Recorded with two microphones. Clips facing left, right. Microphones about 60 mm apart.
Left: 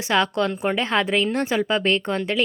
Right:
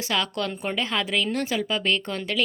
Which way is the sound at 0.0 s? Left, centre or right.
Left.